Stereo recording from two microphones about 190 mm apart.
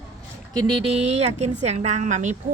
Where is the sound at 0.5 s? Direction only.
20° right (ahead or behind).